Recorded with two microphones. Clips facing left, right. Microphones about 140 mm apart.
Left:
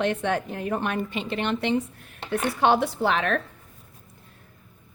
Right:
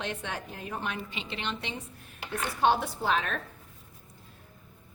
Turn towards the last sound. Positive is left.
turn(degrees=70)  # may be behind; listen again after turning